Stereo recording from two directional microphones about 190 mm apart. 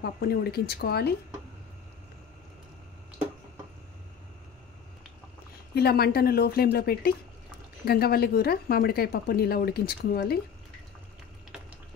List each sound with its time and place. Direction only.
0.0 s speech: 55° left (ahead or behind)
5.8 s speech: 55° left (ahead or behind)